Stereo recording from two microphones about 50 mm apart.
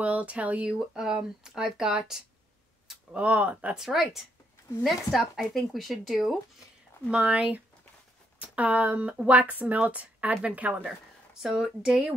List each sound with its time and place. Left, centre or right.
0.0 s speech: right
0.7 s speech: centre
3.1 s speech: right
3.7 s speech: centre
7.1 s speech: right
11.4 s speech: centre